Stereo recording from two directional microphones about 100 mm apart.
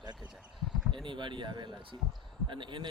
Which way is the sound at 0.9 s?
55° right (ahead or behind).